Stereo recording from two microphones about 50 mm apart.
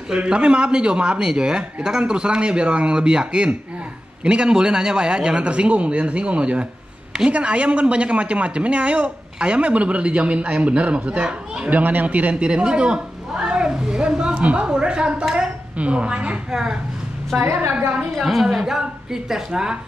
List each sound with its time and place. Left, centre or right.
0.1 s speech: right
11.7 s speech: right; by 14.3 s centre
14.3 s a sound: right
18.1 s a woman's voice: centre